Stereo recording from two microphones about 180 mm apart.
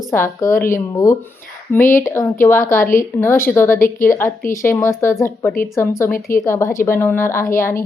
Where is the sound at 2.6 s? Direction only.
50° left (ahead or behind).